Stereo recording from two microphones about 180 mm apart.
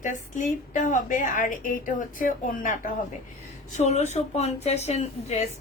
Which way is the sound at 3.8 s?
40° left (ahead or behind).